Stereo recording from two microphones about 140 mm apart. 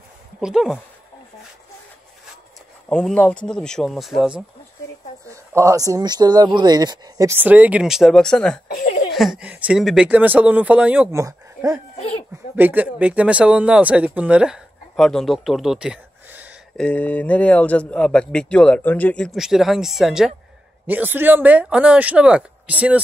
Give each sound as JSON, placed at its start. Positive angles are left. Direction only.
{"t": 0.4, "sound": "speech", "side_deg": -5}
{"t": 2.9, "sound": "speech", "side_deg": 5}
{"t": 5.3, "sound": "speech", "side_deg": -20}
{"t": 11.1, "sound": "speech", "side_deg": -25}
{"t": 12.5, "sound": "speech", "side_deg": -10}
{"t": 16.7, "sound": "speech", "side_deg": 10}
{"t": 19.3, "sound": "speech", "side_deg": 0}